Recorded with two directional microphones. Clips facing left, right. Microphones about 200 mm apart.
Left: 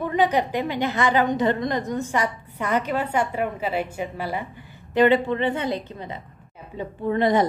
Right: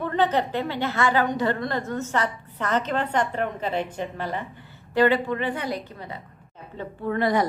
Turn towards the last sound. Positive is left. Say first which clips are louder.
# left 3 dB
turn(degrees=20)  # may be behind; listen again after turning